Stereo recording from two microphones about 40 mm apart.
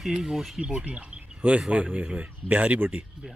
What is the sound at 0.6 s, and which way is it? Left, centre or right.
Speech, right.